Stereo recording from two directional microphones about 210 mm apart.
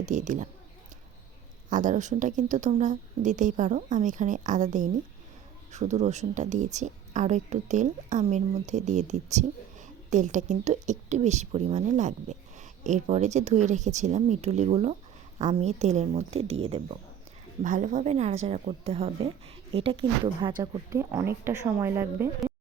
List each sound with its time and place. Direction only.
0.0 s speech: 35° right (ahead or behind)
1.7 s speech: 35° right (ahead or behind)
20.6 s speech: 15° right (ahead or behind)